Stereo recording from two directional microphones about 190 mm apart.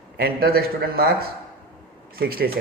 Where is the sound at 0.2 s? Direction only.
55° right (ahead or behind).